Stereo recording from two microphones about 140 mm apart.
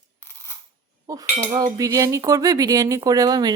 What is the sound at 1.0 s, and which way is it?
Speech, 25° right (ahead or behind).